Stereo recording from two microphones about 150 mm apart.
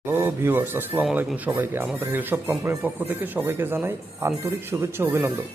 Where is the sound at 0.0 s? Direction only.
15° right (ahead or behind).